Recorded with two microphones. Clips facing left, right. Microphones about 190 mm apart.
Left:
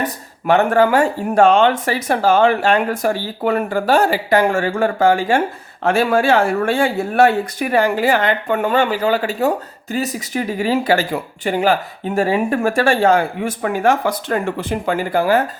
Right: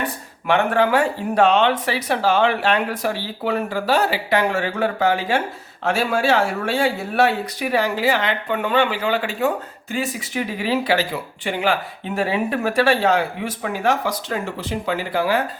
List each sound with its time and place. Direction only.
0.0 s speech: 40° left (ahead or behind)